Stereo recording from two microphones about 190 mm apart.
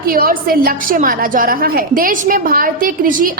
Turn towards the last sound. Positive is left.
turn(degrees=-45)  # may be behind; listen again after turning